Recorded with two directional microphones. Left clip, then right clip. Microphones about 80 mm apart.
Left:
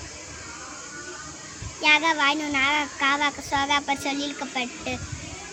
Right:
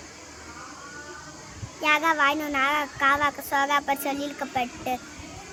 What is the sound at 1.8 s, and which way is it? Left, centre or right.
Speech, right.